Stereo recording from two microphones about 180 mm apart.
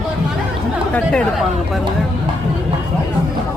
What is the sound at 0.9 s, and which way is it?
Speech, 5° left (ahead or behind).